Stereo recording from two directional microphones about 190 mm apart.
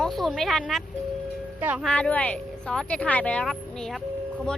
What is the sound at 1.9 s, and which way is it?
Speech, 5° left (ahead or behind).